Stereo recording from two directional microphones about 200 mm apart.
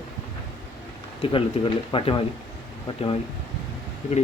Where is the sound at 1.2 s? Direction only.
25° left (ahead or behind).